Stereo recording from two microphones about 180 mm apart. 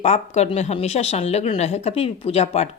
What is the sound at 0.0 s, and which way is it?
A woman's voice, 35° left (ahead or behind).